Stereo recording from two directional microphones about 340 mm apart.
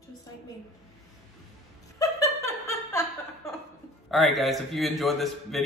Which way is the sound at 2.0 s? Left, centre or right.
Centre.